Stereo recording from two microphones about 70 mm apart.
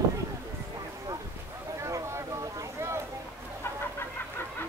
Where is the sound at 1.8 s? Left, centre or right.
Right.